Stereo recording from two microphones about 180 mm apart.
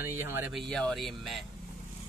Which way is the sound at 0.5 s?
Centre (ahead or behind).